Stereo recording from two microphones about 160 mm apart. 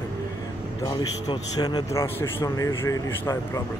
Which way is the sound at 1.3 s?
25° left (ahead or behind).